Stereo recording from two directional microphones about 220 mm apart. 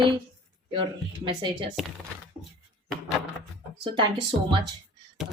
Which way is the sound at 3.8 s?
25° right (ahead or behind).